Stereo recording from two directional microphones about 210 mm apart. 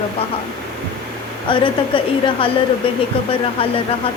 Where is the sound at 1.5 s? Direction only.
25° left (ahead or behind).